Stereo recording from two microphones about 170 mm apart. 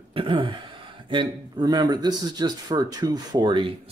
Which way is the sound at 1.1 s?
25° right (ahead or behind).